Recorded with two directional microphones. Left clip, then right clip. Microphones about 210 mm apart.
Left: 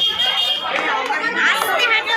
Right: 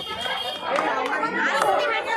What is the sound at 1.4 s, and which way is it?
Chatter, 20° right (ahead or behind).